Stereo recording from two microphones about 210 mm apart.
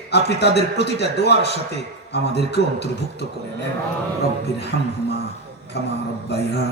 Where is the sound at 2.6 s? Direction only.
50° left (ahead or behind).